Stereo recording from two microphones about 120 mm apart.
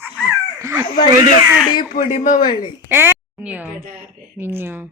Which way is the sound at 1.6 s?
40° left (ahead or behind).